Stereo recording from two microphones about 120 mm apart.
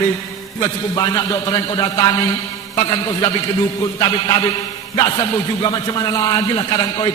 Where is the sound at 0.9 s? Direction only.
35° left (ahead or behind).